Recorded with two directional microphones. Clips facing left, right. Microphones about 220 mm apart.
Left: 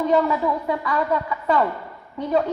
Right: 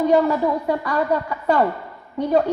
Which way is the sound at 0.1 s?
45° right (ahead or behind).